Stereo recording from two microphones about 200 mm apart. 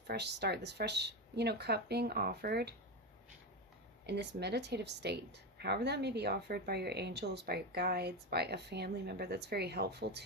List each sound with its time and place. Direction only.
0.1 s a woman's voice: 55° right (ahead or behind)
4.0 s a woman's voice: 55° right (ahead or behind)